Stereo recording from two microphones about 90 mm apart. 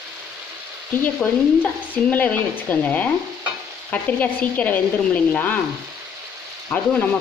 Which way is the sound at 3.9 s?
15° left (ahead or behind).